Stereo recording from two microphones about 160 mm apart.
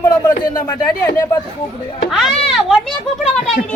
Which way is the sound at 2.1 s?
Centre (ahead or behind).